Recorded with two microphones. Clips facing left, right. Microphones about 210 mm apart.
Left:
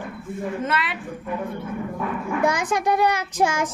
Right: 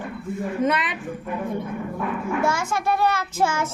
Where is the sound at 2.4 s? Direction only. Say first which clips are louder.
Left 5 dB; 15° left (ahead or behind).